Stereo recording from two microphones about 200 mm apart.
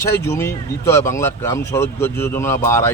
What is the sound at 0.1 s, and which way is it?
Speech, 15° left (ahead or behind).